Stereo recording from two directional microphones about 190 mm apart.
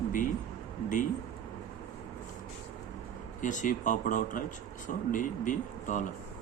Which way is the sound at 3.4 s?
40° left (ahead or behind).